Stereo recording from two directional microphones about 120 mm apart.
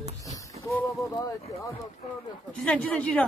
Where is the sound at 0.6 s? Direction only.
65° right (ahead or behind).